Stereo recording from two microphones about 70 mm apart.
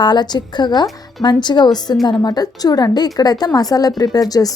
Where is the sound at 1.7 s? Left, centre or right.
Left.